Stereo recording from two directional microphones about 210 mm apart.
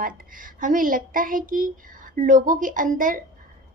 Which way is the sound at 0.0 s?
40° right (ahead or behind).